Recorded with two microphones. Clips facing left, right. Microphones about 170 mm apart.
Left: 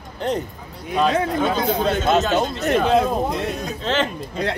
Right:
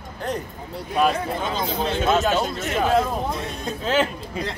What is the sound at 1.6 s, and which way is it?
Speech, 50° left (ahead or behind).